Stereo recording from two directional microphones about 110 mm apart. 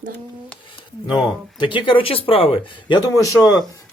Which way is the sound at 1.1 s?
45° left (ahead or behind).